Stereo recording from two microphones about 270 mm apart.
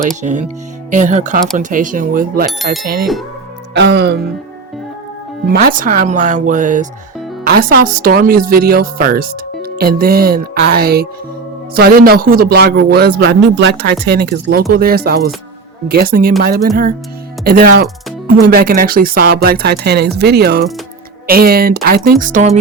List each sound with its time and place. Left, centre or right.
0.2 s a woman's voice: right
5.5 s a woman's voice: right